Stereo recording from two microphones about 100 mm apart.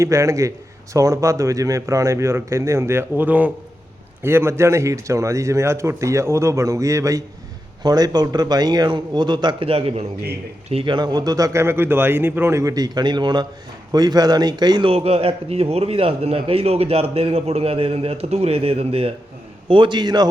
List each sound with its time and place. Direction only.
0.0 s a man's voice: 30° right (ahead or behind); by 10.0 s 75° right (ahead or behind)
10.8 s a man's voice: 45° right (ahead or behind)
14.8 s a man's voice: 75° right (ahead or behind)
19.6 s a man's voice: 55° right (ahead or behind)